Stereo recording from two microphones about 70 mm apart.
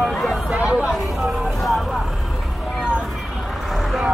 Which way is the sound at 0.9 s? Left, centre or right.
Centre.